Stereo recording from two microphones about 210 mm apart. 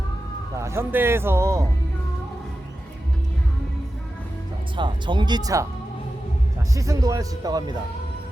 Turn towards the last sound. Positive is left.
turn(degrees=-15)  # may be behind; listen again after turning